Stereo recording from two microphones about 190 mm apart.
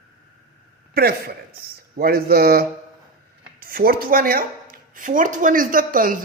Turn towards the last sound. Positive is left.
turn(degrees=-45)  # may be behind; listen again after turning